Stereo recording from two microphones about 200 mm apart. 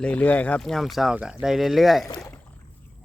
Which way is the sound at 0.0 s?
10° left (ahead or behind).